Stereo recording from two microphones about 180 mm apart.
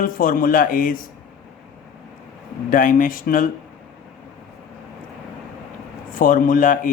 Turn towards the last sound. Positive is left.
turn(degrees=50)  # may be behind; listen again after turning